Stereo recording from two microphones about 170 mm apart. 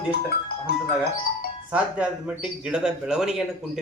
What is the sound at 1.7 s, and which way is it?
Speech, 5° right (ahead or behind).